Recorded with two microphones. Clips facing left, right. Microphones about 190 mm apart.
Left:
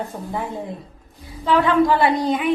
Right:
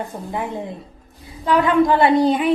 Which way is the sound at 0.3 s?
20° right (ahead or behind).